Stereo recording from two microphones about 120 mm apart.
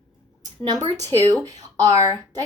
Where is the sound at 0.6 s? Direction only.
35° right (ahead or behind).